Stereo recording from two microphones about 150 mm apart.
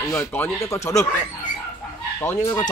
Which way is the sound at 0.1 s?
15° left (ahead or behind).